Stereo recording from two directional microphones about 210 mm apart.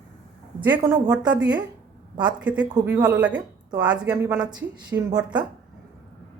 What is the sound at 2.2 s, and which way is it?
Speech, 5° right (ahead or behind).